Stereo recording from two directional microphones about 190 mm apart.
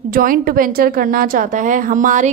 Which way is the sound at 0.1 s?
50° right (ahead or behind).